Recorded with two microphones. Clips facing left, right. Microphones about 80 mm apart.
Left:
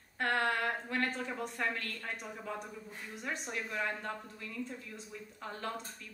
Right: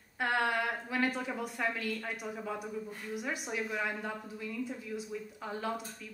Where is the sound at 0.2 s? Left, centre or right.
Centre.